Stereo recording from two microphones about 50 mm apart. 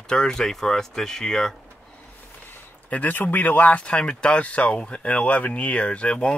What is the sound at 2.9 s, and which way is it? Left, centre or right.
Speech, left.